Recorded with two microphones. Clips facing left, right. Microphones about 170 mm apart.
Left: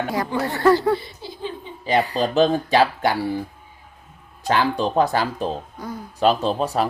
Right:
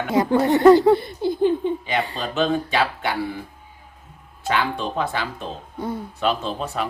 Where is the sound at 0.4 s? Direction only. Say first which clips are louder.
Right 5 dB; 20° right (ahead or behind).